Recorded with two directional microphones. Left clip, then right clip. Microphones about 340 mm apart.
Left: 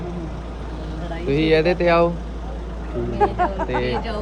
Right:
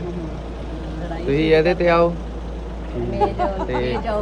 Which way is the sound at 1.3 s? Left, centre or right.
Centre.